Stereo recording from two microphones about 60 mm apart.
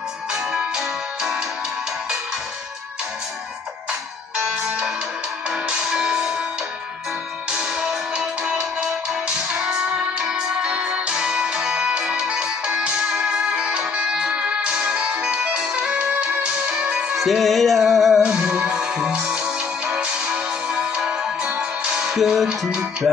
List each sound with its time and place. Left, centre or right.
0.3 s music: centre
4.6 s music: centre
7.5 s music: centre
17.1 s music: centre
18.2 s music: centre